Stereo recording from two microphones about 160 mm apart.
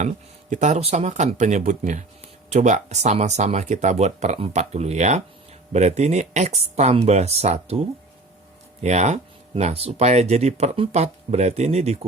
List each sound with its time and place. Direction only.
0.5 s speech: 50° right (ahead or behind)
8.8 s speech: 45° right (ahead or behind)